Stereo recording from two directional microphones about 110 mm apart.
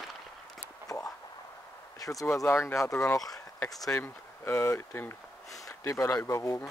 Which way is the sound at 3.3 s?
30° left (ahead or behind).